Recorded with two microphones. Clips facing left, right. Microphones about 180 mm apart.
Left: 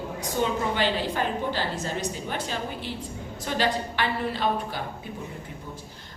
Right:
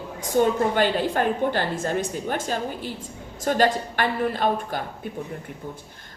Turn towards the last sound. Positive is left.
turn(degrees=-50)  # may be behind; listen again after turning